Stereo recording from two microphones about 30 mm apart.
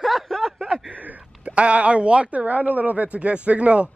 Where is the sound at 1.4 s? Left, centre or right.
Right.